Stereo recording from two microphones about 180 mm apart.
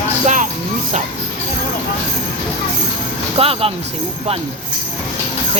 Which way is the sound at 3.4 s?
30° right (ahead or behind).